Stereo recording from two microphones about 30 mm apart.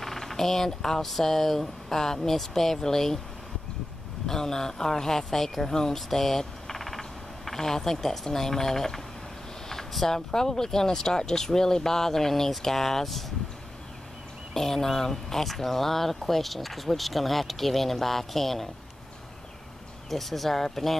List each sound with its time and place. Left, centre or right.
0.0 s speech: centre
4.3 s speech: centre
5.9 s speech: centre
14.5 s speech: centre
20.1 s speech: centre